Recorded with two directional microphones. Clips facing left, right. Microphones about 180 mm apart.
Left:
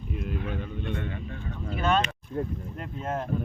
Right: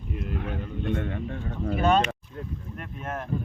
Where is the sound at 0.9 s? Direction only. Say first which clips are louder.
Right 4 dB; 55° right (ahead or behind).